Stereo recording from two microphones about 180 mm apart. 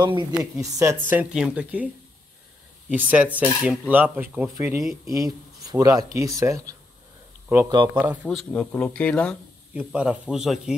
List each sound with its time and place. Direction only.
0.0 s speech: 25° right (ahead or behind); by 1.9 s 10° right (ahead or behind)
2.9 s speech: 10° right (ahead or behind)
7.9 s speech: 10° right (ahead or behind)
8.2 s speech: 5° left (ahead or behind)
9.8 s speech: 5° right (ahead or behind)